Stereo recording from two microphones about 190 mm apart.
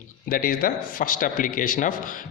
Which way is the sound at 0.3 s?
50° left (ahead or behind).